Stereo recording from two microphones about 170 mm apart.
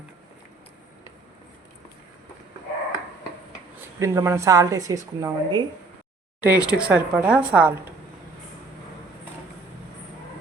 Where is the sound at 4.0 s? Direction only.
15° right (ahead or behind).